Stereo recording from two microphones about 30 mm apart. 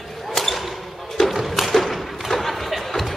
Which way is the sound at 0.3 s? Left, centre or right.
Centre.